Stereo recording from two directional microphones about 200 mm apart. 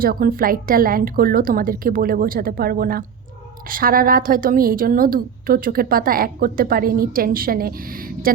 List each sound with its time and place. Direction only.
0.0 s a woman's voice: 45° right (ahead or behind)